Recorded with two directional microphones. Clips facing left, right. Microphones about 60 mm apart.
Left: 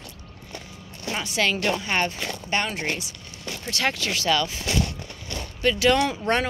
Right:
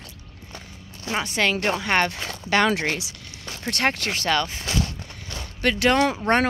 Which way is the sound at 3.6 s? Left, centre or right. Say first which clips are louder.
Right 3 dB; right.